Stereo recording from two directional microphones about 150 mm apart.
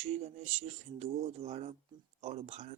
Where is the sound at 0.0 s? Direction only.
45° right (ahead or behind).